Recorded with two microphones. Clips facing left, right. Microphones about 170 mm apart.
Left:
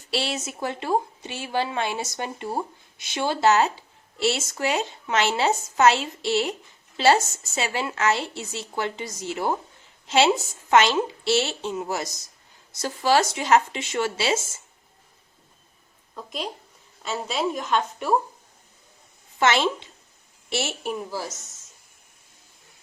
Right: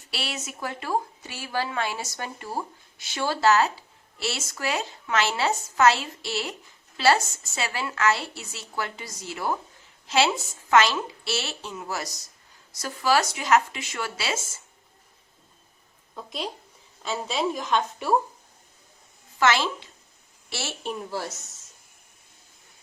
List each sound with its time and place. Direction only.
0.1 s a woman's voice: 25° left (ahead or behind)
16.1 s a woman's voice: centre (ahead or behind)
19.4 s a woman's voice: 20° left (ahead or behind)
20.8 s a woman's voice: 5° left (ahead or behind)